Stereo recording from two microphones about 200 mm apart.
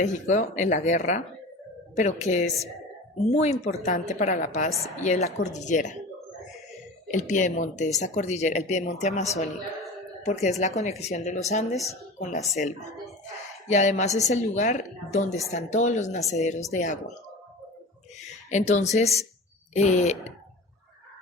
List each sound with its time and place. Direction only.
0.0 s a woman's voice: 35° left (ahead or behind)
7.1 s a woman's voice: 35° left (ahead or behind)
10.2 s a woman's voice: 35° left (ahead or behind)
18.5 s a woman's voice: 35° left (ahead or behind)